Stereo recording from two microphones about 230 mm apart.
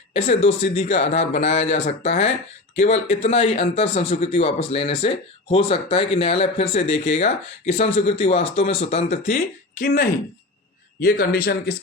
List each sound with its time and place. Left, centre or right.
0.3 s speech: left
9.3 s a man's voice: left